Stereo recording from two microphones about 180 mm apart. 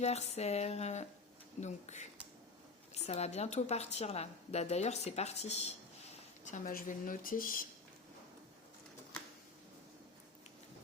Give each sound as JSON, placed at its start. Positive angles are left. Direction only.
{"t": 0.0, "sound": "a woman's voice", "side_deg": 35}